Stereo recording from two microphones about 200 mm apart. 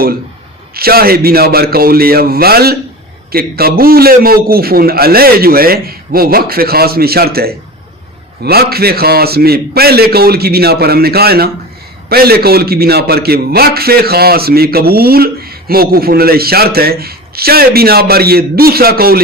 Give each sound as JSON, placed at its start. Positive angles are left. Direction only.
{"t": 0.7, "sound": "a man's voice", "side_deg": -50}